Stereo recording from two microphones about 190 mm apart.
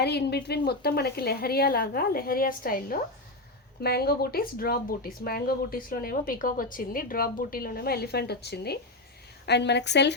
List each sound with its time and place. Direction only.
0.0 s a woman's voice: 60° left (ahead or behind)